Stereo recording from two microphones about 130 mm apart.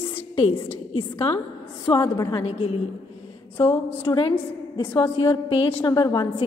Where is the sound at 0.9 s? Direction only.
45° left (ahead or behind).